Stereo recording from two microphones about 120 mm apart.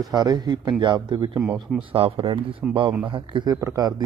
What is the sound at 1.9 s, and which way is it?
Speech, 50° right (ahead or behind).